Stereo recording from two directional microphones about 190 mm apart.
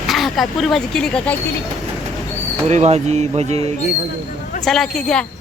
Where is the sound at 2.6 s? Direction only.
35° right (ahead or behind).